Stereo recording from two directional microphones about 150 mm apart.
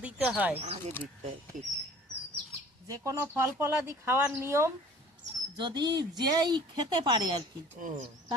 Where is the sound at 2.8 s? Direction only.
20° right (ahead or behind).